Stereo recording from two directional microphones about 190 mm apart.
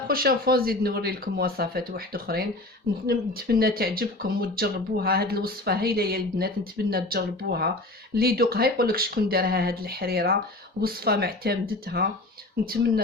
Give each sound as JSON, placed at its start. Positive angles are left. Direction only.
{"t": 0.1, "sound": "speech", "side_deg": -50}